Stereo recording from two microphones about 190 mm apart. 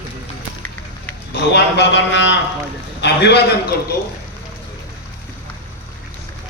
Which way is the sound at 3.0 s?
60° left (ahead or behind).